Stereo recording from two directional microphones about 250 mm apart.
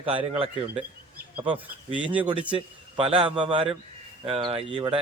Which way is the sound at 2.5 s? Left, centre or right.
Right.